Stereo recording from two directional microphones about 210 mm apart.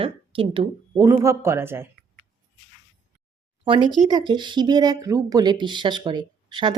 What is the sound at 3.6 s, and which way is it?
A woman's voice, 25° right (ahead or behind).